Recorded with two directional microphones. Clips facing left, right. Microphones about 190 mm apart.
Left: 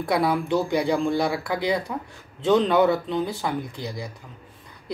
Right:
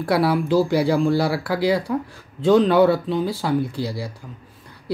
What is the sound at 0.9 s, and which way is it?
Speech, 5° right (ahead or behind).